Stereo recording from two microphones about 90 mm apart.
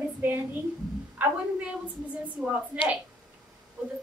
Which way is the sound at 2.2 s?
15° right (ahead or behind).